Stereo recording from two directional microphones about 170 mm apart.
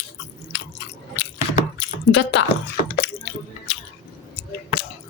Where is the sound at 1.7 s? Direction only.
90° left.